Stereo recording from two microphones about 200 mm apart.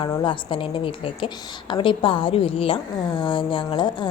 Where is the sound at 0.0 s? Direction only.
25° left (ahead or behind).